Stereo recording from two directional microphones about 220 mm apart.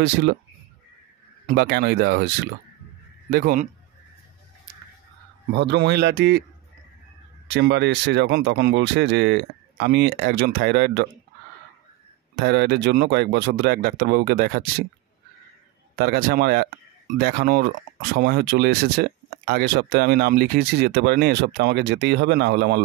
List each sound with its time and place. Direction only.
0.0 s speech: 50° right (ahead or behind)
1.5 s a man's voice: 50° right (ahead or behind)
5.5 s speech: 50° right (ahead or behind)
7.4 s speech: 50° right (ahead or behind)
12.4 s speech: 50° right (ahead or behind)
16.0 s speech: 40° right (ahead or behind)